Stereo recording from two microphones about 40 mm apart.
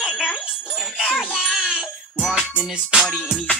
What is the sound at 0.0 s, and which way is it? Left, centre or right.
Jingle bell, centre.